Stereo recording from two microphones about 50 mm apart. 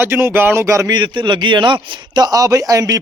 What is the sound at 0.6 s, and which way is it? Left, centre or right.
Speech, right.